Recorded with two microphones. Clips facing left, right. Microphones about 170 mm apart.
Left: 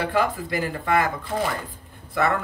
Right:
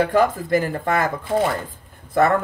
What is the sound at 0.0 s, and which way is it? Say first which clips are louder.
Speech: right 5 dB; 45° right (ahead or behind).